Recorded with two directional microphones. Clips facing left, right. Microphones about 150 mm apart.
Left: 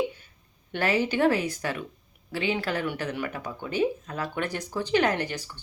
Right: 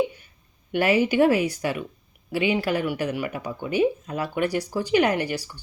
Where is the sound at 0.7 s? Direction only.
10° right (ahead or behind).